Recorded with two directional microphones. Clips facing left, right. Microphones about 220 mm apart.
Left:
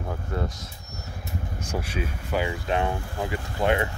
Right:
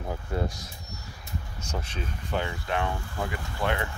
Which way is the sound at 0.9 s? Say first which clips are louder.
Left 5 dB; 50° left (ahead or behind).